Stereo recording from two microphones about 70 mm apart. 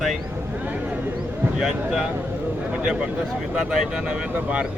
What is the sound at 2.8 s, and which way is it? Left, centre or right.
Speech, centre.